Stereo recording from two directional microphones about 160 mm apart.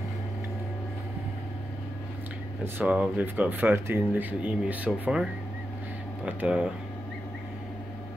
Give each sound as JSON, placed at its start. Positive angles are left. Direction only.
{"t": 2.6, "sound": "speech", "side_deg": -10}